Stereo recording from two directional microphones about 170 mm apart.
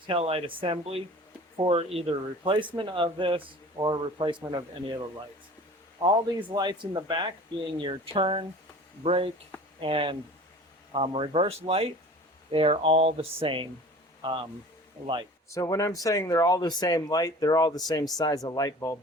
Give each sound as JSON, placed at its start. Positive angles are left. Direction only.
{"t": 0.1, "sound": "speech", "side_deg": -35}
{"t": 6.0, "sound": "speech", "side_deg": -25}
{"t": 15.4, "sound": "speech", "side_deg": 20}